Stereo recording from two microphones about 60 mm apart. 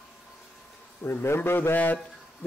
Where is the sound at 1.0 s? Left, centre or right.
Left.